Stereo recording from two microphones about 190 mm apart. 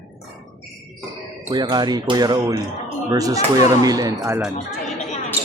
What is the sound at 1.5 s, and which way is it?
Speech, 20° right (ahead or behind).